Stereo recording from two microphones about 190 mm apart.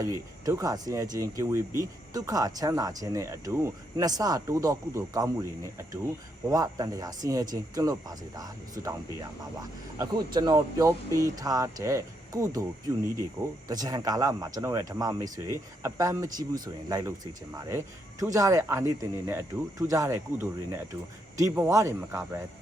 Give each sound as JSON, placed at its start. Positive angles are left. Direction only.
{"t": 0.0, "sound": "speech", "side_deg": -15}
{"t": 13.7, "sound": "speech", "side_deg": -20}